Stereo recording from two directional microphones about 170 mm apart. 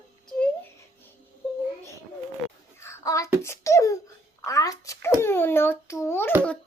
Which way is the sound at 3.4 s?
15° left (ahead or behind).